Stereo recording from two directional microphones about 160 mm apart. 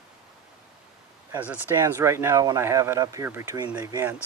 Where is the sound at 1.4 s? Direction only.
15° right (ahead or behind).